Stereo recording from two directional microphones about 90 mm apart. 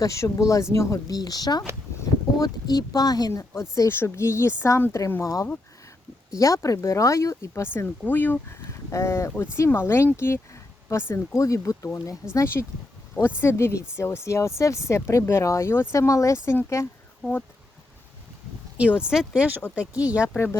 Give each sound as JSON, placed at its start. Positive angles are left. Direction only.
{"t": 0.0, "sound": "speech", "side_deg": 35}
{"t": 1.0, "sound": "speech", "side_deg": 45}
{"t": 3.5, "sound": "speech", "side_deg": 30}
{"t": 10.2, "sound": "a sound", "side_deg": 30}
{"t": 11.3, "sound": "speech", "side_deg": 40}
{"t": 18.9, "sound": "speech", "side_deg": -10}
{"t": 20.3, "sound": "speech", "side_deg": 30}